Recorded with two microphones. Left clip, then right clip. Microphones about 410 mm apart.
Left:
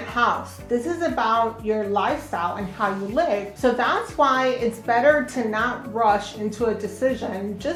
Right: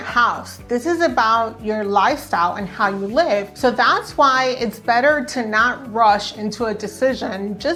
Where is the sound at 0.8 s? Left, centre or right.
Right.